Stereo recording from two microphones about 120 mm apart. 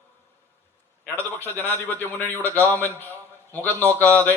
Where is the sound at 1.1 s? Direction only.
20° right (ahead or behind).